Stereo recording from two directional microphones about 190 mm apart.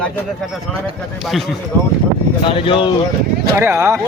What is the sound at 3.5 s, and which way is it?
Speech, 10° right (ahead or behind).